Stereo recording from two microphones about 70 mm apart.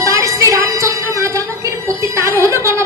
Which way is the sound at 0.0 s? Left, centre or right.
Right.